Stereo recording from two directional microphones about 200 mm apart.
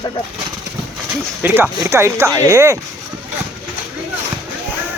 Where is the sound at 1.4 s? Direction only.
10° right (ahead or behind).